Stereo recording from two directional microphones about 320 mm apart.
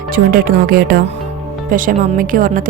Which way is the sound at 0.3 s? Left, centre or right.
Right.